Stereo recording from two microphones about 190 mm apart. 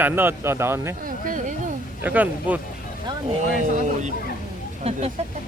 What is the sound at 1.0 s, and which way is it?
Speech, 45° right (ahead or behind).